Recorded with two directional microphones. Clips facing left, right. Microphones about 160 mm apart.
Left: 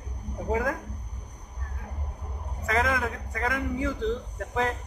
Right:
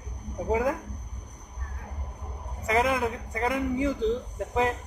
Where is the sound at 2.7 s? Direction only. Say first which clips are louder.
Right 2 dB; 20° right (ahead or behind).